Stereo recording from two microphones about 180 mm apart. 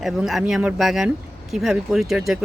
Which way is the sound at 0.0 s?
Centre (ahead or behind).